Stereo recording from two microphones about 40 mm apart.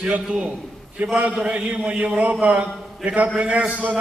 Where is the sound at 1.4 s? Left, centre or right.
Right.